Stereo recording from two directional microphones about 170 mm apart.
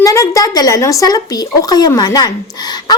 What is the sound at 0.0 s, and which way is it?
A woman's voice, 20° left (ahead or behind).